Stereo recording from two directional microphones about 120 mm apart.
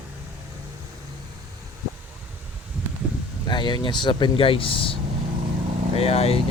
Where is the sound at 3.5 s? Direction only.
40° left (ahead or behind).